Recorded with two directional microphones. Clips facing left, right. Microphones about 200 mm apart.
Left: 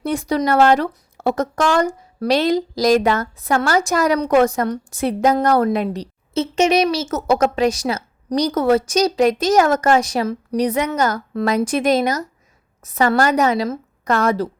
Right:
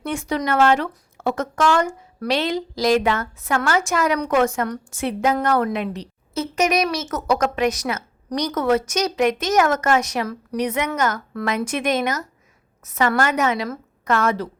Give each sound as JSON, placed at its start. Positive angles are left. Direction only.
{"t": 0.0, "sound": "speech", "side_deg": 35}
{"t": 6.3, "sound": "speech", "side_deg": 25}